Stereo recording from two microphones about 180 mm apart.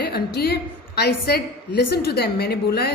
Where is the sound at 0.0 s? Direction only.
60° left (ahead or behind).